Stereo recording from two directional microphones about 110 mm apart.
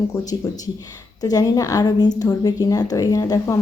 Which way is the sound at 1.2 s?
30° left (ahead or behind).